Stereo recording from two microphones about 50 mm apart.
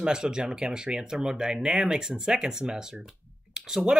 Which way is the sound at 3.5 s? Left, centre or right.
Centre.